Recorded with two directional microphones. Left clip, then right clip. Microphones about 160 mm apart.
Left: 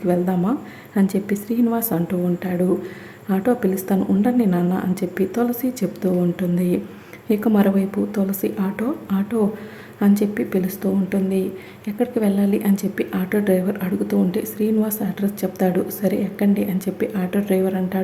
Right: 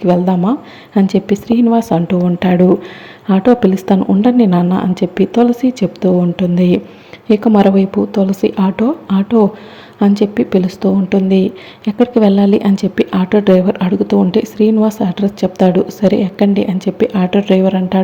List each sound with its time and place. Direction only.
0.0 s speech: 20° right (ahead or behind)
2.4 s speech: 35° right (ahead or behind)